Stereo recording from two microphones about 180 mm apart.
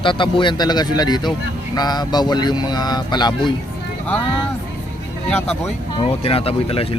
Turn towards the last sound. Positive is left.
turn(degrees=30)  # may be behind; listen again after turning